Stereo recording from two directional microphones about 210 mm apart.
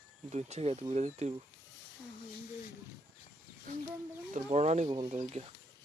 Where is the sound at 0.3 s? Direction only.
30° right (ahead or behind).